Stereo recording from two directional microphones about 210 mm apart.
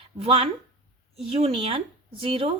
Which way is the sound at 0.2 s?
30° right (ahead or behind).